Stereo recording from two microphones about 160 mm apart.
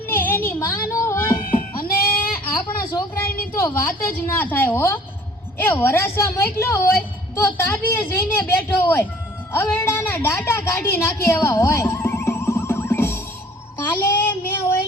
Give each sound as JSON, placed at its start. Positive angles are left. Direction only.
{"t": 0.1, "sound": "music", "side_deg": 10}
{"t": 1.5, "sound": "goat", "side_deg": 65}
{"t": 2.4, "sound": "a sound", "side_deg": 10}
{"t": 3.2, "sound": "a woman's voice", "side_deg": 65}
{"t": 3.6, "sound": "a woman's voice", "side_deg": 15}